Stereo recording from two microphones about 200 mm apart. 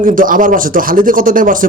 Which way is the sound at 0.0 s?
45° right (ahead or behind).